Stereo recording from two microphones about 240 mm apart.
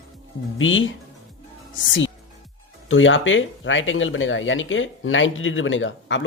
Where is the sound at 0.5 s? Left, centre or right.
Left.